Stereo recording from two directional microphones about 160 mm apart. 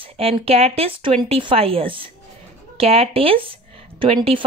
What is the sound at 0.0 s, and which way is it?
Speech, 40° right (ahead or behind).